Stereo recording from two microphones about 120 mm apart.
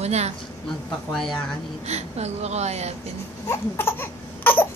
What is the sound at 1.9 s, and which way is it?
A woman's voice, 65° right (ahead or behind).